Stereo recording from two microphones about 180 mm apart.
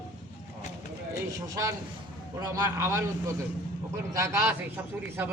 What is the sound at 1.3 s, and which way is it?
A man's voice, 20° right (ahead or behind).